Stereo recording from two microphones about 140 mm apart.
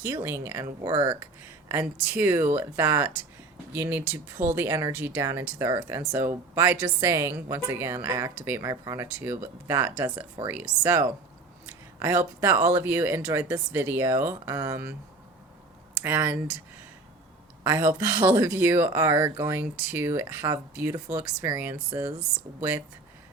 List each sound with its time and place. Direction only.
0.0 s speech: 20° right (ahead or behind)
16.0 s speech: 15° right (ahead or behind)
17.6 s speech: 20° right (ahead or behind)